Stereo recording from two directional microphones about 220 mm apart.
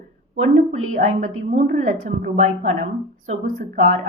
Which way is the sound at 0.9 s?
35° right (ahead or behind).